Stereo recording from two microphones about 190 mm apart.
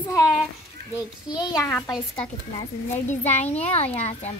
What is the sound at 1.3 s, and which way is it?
Speech, 20° left (ahead or behind).